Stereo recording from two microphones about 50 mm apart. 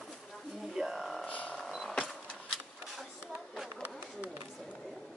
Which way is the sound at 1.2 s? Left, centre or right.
Left.